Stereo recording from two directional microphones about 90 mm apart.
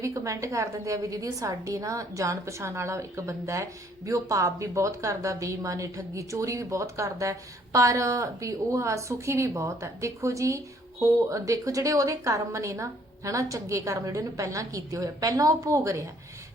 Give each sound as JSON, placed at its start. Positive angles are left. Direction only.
{"t": 0.0, "sound": "a woman's voice", "side_deg": -35}